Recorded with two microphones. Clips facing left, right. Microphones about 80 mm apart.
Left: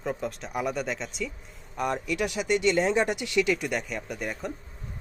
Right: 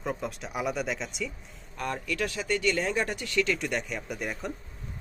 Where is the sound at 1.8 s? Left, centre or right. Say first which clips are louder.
Left 3 dB; centre.